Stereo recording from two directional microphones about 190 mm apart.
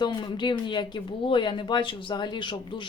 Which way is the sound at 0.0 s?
25° left (ahead or behind).